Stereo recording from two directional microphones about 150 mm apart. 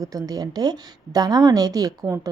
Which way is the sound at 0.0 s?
25° right (ahead or behind).